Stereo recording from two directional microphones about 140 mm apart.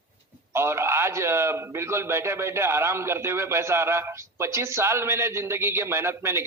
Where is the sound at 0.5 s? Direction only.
20° right (ahead or behind).